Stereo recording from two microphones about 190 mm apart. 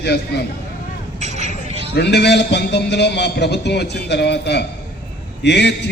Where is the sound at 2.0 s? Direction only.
60° left (ahead or behind).